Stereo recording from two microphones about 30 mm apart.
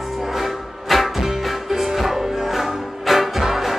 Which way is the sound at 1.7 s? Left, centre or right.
Centre.